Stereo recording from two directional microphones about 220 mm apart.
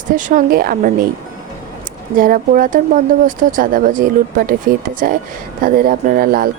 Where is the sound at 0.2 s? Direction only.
35° right (ahead or behind).